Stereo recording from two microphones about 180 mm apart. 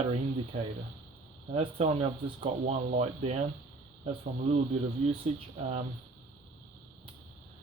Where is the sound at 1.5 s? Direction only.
30° right (ahead or behind).